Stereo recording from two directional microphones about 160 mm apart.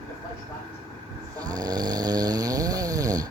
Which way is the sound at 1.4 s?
25° right (ahead or behind).